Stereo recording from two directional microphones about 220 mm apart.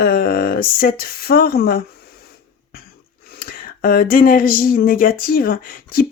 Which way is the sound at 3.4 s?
40° left (ahead or behind).